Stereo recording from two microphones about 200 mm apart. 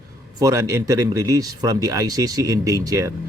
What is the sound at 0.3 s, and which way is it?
Speech, 15° right (ahead or behind).